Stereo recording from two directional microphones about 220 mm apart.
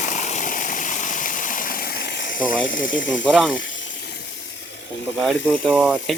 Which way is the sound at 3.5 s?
60° left (ahead or behind).